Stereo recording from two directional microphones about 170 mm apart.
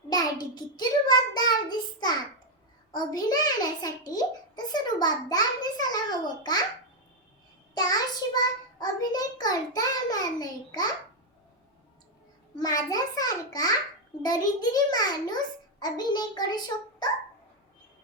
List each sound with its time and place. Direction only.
0.1 s a child's voice: 25° left (ahead or behind)
7.8 s a child's voice: 20° left (ahead or behind)
12.5 s a child's voice: 20° left (ahead or behind)